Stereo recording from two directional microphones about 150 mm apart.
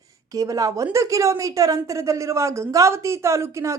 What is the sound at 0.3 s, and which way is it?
A woman's voice, 25° right (ahead or behind).